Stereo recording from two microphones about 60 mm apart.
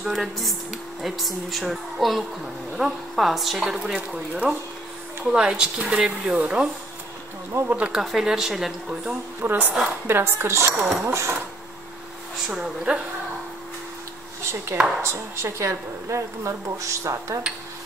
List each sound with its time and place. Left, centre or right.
0.0 s speech: centre
4.5 s a woman's voice: right
5.3 s speech: centre
7.6 s speech: right
8.0 s speech: centre
9.4 s a woman's voice: right
10.8 s speech: centre
11.1 s speech: right
12.4 s speech: centre
14.4 s a woman's voice: right